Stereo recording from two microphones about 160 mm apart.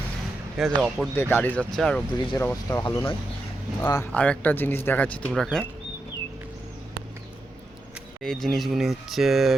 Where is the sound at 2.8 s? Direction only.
30° left (ahead or behind).